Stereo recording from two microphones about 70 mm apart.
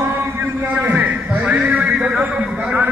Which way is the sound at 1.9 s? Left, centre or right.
Centre.